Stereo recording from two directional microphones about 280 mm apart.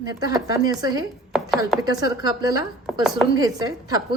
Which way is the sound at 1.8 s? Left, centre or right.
Centre.